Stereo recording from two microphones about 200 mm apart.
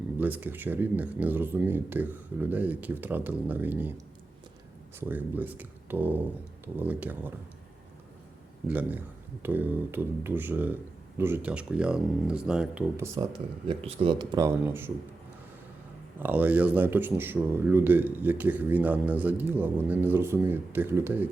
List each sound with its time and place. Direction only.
0.2 s speech: 10° right (ahead or behind)
8.6 s speech: 10° right (ahead or behind)
13.7 s speech: 30° right (ahead or behind); by 14.9 s 10° right (ahead or behind)
16.2 s speech: 10° right (ahead or behind)